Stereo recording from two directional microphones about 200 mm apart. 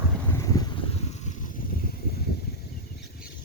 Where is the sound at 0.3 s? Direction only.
15° left (ahead or behind).